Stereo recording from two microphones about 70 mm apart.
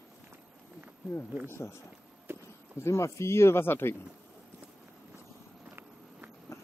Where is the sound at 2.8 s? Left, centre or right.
Left.